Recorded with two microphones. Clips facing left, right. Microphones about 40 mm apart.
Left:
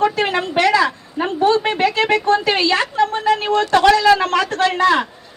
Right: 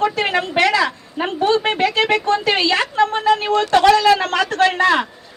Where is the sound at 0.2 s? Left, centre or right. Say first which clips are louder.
Even; right.